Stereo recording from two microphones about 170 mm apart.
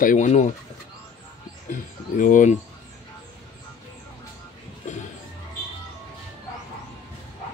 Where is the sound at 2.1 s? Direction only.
50° left (ahead or behind).